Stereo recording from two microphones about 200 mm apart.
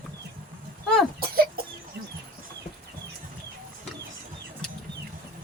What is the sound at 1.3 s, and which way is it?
Chicken, 50° right (ahead or behind).